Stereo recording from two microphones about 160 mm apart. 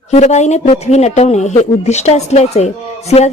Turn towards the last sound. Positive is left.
turn(degrees=45)  # may be behind; listen again after turning